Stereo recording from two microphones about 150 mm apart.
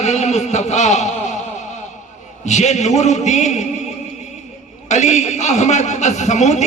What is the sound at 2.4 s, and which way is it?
A man's voice, 50° left (ahead or behind).